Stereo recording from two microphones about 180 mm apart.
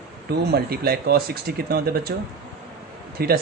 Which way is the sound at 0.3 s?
60° right (ahead or behind).